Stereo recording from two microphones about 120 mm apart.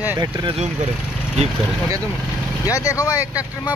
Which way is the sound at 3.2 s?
15° right (ahead or behind).